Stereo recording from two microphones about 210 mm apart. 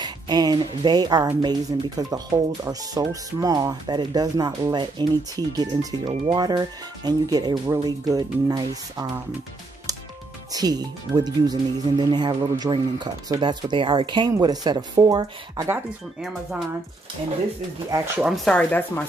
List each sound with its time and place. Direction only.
0.0 s a woman's voice: 20° right (ahead or behind)
10.5 s a woman's voice: 20° right (ahead or behind)
17.9 s speech: 10° right (ahead or behind)
18.3 s speech: 5° left (ahead or behind)